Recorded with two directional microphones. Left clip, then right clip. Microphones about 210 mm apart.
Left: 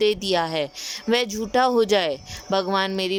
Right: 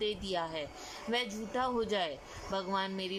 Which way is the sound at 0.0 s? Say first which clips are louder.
Left 14 dB; 50° left (ahead or behind).